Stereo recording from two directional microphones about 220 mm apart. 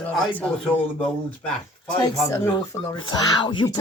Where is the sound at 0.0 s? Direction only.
5° left (ahead or behind).